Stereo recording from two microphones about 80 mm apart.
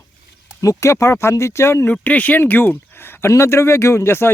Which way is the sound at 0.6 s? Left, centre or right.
Left.